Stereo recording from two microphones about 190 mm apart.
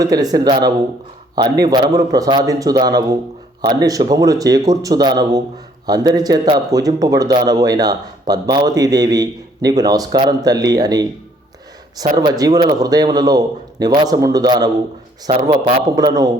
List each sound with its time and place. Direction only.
0.0 s speech: 20° right (ahead or behind)
12.1 s speech: 20° right (ahead or behind)